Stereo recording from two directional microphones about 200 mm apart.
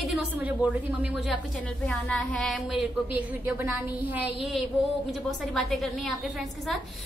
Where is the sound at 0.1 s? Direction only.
5° right (ahead or behind).